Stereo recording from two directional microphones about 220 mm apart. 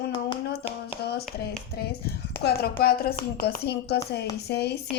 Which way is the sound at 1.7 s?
45° left (ahead or behind).